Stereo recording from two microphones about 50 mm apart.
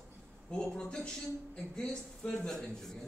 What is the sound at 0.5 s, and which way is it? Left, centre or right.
A man's voice, centre.